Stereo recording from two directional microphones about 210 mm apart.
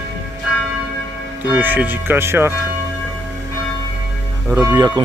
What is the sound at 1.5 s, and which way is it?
Speech, 5° right (ahead or behind).